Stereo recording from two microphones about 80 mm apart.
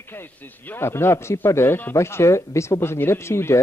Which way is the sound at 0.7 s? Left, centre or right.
Left.